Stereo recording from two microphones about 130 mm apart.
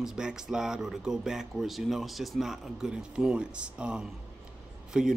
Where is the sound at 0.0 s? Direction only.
5° right (ahead or behind).